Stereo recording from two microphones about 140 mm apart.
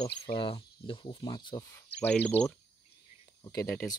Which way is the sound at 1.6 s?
20° left (ahead or behind).